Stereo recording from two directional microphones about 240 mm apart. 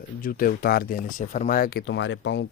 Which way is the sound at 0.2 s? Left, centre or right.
Left.